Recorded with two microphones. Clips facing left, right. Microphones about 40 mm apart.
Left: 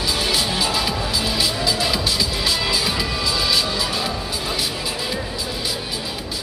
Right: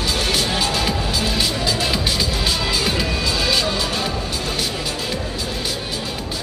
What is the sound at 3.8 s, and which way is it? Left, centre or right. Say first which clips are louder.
Music: right 1 dB; centre.